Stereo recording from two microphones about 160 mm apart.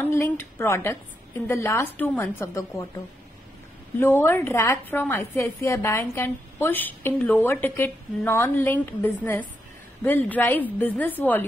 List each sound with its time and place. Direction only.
0.0 s a woman's voice: 15° left (ahead or behind)
4.0 s a woman's voice: 15° left (ahead or behind)